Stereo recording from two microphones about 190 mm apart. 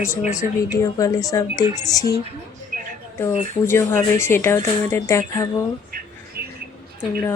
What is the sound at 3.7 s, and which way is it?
Speech, 15° left (ahead or behind).